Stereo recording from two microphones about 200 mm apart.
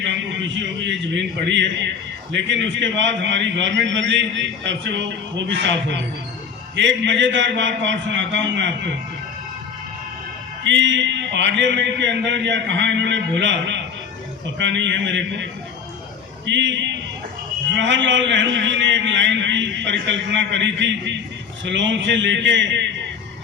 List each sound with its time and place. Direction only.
0.0 s a man's voice: 65° right (ahead or behind)
10.7 s a man's voice: 65° right (ahead or behind)
16.5 s a man's voice: 65° right (ahead or behind)